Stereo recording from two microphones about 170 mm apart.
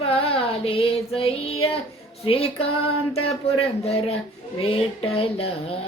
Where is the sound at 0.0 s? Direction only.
35° left (ahead or behind).